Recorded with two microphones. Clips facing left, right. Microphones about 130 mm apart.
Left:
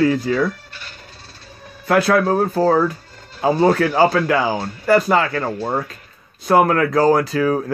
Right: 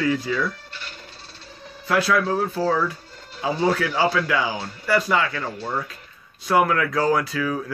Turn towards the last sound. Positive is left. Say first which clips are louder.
# left 6 dB
turn(degrees=40)  # may be behind; listen again after turning